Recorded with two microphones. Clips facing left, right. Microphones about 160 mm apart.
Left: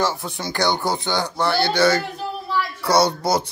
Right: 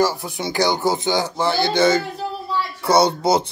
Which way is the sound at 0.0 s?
5° right (ahead or behind).